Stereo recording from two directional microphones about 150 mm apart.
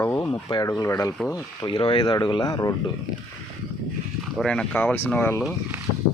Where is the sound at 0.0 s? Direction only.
15° left (ahead or behind).